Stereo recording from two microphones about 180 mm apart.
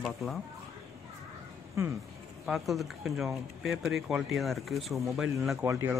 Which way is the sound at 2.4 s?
Centre (ahead or behind).